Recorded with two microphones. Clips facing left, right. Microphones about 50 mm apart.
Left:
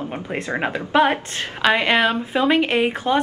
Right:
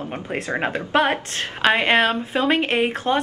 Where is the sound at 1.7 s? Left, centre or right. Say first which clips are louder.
Even; right.